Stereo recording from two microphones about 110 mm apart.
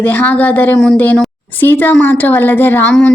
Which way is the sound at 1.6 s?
20° left (ahead or behind).